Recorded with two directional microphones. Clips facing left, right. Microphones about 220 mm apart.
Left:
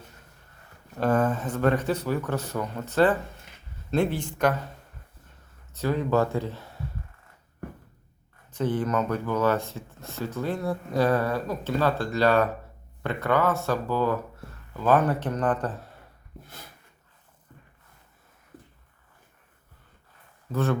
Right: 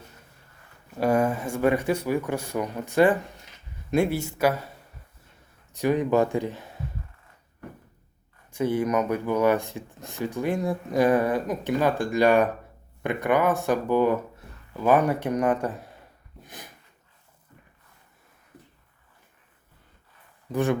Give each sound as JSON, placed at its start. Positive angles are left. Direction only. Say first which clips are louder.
{"t": 0.9, "sound": "speech", "louder": "right 1 dB", "side_deg": -10}
{"t": 5.7, "sound": "speech", "louder": "right 3 dB", "side_deg": -15}
{"t": 8.5, "sound": "speech", "louder": "right 2 dB", "side_deg": -10}
{"t": 16.5, "sound": "dog", "louder": "right 5 dB", "side_deg": -15}
{"t": 20.5, "sound": "speech", "louder": "right 2 dB", "side_deg": -15}